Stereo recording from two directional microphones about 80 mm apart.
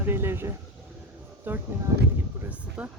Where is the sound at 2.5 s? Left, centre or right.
Centre.